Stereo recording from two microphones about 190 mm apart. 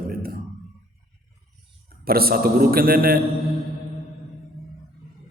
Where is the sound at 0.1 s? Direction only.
50° right (ahead or behind).